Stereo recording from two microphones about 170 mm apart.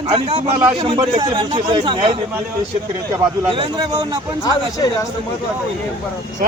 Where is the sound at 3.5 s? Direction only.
30° right (ahead or behind).